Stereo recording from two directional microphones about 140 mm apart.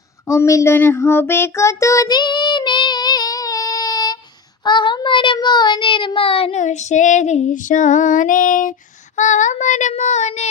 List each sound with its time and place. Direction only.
0.3 s child singing: 20° left (ahead or behind); by 6.6 s 45° left (ahead or behind)
6.6 s female singing: 55° left (ahead or behind)
9.1 s female singing: 60° left (ahead or behind)